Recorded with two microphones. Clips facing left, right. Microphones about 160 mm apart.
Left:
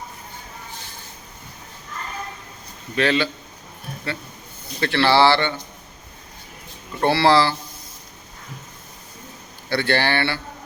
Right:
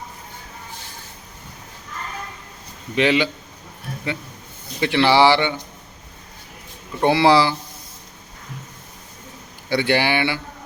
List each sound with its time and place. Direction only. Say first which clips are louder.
2.9 s speech: right 2 dB; 15° right (ahead or behind)
4.8 s speech: right 1 dB; 15° right (ahead or behind)
7.0 s speech: right 2 dB; 15° right (ahead or behind)
9.6 s speech: right 2 dB; 15° right (ahead or behind)